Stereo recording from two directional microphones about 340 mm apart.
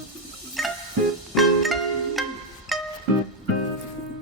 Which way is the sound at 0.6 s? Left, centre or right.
Centre.